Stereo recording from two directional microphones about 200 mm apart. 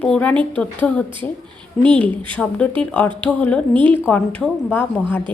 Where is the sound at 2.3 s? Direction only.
5° left (ahead or behind).